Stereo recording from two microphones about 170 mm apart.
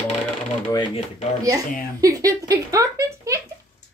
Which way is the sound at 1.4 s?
20° right (ahead or behind).